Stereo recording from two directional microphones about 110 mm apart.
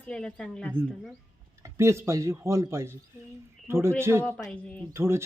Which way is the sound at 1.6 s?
25° right (ahead or behind).